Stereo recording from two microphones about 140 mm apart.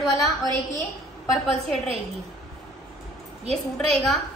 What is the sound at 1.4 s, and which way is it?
Speech, centre (ahead or behind).